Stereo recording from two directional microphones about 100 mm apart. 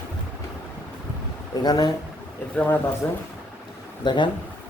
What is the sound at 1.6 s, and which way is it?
Speech, 40° left (ahead or behind).